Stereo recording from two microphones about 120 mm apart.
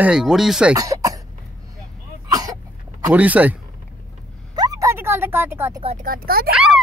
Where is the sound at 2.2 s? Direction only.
30° right (ahead or behind).